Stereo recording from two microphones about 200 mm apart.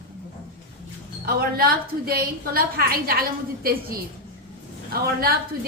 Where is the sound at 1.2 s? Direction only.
50° right (ahead or behind).